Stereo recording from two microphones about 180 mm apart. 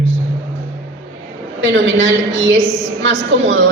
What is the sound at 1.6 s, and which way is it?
A woman's voice, 90° right.